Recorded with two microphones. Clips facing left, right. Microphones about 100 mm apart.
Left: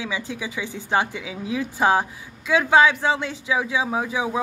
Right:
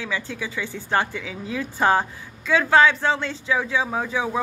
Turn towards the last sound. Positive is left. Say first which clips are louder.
# left 1 dB
turn(degrees=15)  # may be behind; listen again after turning